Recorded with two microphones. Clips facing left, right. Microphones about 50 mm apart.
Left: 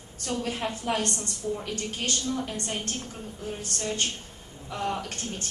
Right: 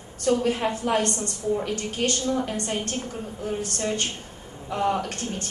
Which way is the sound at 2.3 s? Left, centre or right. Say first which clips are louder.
Right 5 dB; right.